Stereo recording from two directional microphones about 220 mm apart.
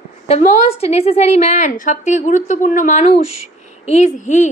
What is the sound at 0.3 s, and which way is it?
A woman's voice, 30° left (ahead or behind).